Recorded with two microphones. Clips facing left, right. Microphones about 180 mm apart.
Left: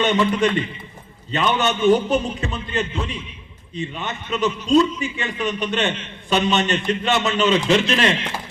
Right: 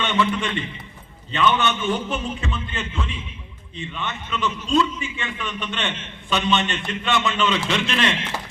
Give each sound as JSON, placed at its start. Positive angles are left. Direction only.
{"t": 0.0, "sound": "a man's voice", "side_deg": 40}